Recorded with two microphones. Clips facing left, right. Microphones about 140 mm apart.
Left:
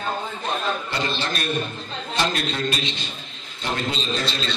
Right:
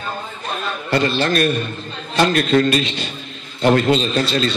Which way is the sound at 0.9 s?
55° right (ahead or behind).